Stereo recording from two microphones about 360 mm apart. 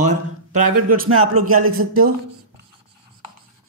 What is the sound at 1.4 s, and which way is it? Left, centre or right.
Speech, right.